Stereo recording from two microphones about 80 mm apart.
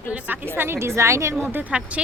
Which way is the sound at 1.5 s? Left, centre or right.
Centre.